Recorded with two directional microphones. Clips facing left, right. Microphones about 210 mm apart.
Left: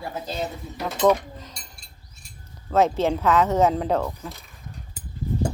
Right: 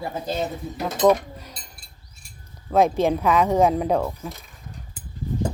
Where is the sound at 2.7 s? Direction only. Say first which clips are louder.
Right 2 dB; 15° right (ahead or behind).